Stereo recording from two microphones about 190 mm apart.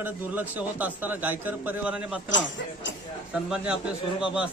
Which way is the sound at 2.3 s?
75° left (ahead or behind).